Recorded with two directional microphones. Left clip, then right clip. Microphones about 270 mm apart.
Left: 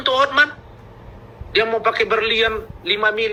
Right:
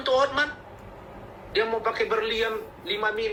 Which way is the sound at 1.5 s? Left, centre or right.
Centre.